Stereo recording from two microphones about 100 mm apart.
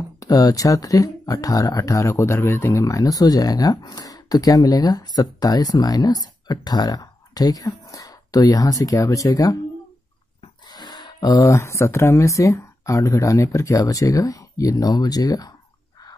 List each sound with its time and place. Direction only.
0.2 s speech: 35° left (ahead or behind)
10.7 s speech: 45° left (ahead or behind)